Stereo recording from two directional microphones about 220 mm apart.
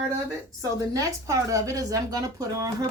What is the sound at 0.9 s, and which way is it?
Speech, 15° right (ahead or behind).